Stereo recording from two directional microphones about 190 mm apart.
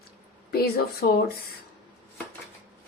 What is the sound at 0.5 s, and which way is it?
Speech, 55° left (ahead or behind).